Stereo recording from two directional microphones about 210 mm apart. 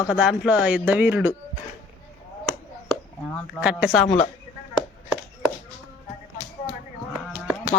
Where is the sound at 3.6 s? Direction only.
5° right (ahead or behind).